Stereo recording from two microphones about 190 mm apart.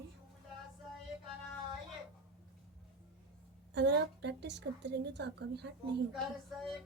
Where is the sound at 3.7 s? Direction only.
65° right (ahead or behind).